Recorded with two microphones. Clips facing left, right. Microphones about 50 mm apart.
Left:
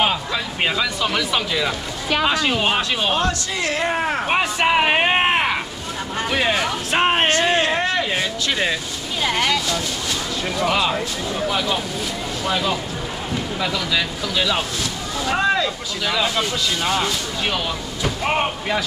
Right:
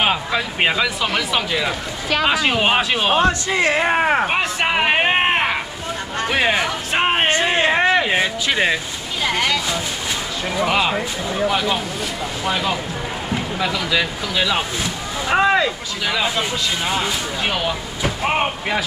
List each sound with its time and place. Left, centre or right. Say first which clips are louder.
0.0 s speech: right 2 dB; centre
4.3 s speech: left 1 dB; centre
6.9 s music: left 1 dB; centre
7.2 s a sound: right 1 dB; centre
9.2 s speech: even; centre
10.5 s speech: right 2 dB; centre